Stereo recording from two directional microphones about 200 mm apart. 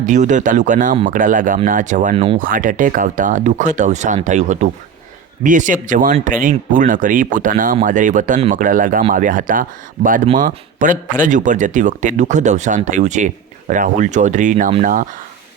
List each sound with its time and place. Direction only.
0.0 s a man's voice: 40° right (ahead or behind)